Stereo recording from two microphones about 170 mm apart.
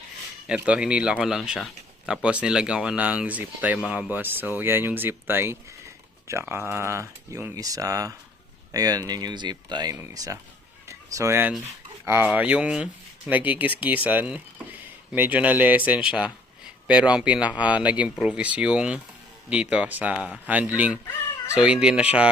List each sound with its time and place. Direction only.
0.4 s speech: 5° right (ahead or behind)
10.8 s a sound: 15° right (ahead or behind)
12.0 s speech: 10° right (ahead or behind)